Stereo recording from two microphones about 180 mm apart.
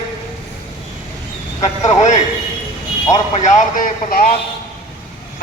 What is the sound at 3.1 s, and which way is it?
A man's voice, 40° left (ahead or behind).